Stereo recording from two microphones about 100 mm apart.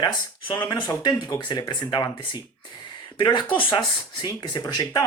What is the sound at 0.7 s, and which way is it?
Speech, 45° left (ahead or behind).